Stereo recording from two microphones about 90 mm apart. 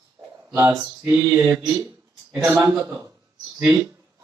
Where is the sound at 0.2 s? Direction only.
35° right (ahead or behind).